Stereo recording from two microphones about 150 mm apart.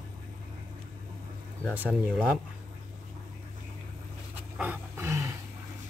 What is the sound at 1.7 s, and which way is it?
Speech, 10° right (ahead or behind).